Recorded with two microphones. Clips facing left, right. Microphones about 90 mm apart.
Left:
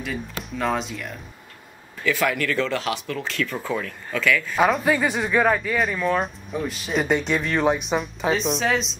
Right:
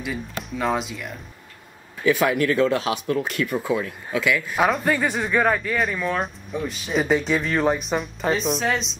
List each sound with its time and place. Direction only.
0.0 s speech: centre (ahead or behind)
2.0 s speech: 20° right (ahead or behind)
4.5 s speech: centre (ahead or behind)